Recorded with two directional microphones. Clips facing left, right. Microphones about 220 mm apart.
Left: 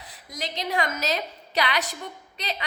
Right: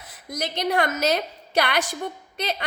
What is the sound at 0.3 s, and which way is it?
A woman's voice, 50° right (ahead or behind).